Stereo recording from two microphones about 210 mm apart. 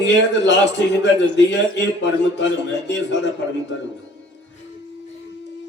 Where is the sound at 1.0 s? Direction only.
55° left (ahead or behind).